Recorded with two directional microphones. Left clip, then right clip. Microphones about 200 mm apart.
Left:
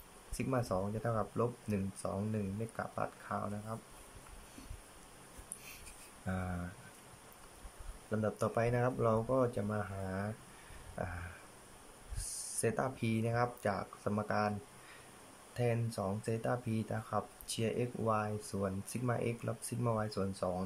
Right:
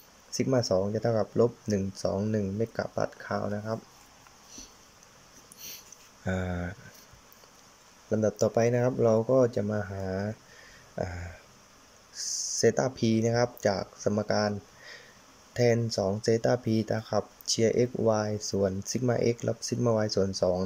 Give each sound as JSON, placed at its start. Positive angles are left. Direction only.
{"t": 0.4, "sound": "speech", "side_deg": -25}
{"t": 6.2, "sound": "speech", "side_deg": -30}
{"t": 8.1, "sound": "speech", "side_deg": -30}
{"t": 12.3, "sound": "a sound", "side_deg": 0}
{"t": 12.5, "sound": "speech", "side_deg": -20}
{"t": 15.5, "sound": "speech", "side_deg": -25}